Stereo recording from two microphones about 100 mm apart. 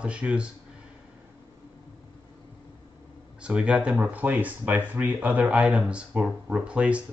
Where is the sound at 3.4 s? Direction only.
10° right (ahead or behind).